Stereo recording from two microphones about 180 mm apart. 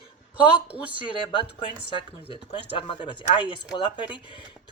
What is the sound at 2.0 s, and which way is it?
Speech, 30° left (ahead or behind).